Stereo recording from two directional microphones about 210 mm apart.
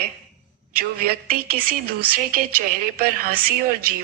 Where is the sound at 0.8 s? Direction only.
45° right (ahead or behind).